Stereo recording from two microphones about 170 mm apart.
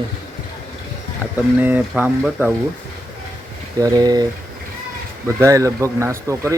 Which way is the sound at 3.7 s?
20° right (ahead or behind).